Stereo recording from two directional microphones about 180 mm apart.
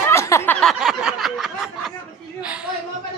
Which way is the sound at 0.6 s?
Centre (ahead or behind).